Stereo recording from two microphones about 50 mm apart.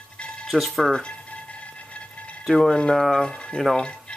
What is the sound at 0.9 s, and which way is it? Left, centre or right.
Speech, left.